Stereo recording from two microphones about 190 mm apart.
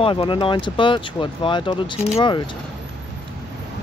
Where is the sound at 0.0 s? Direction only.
25° left (ahead or behind).